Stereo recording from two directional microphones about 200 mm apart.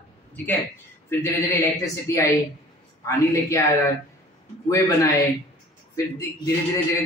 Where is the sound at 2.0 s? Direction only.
15° left (ahead or behind).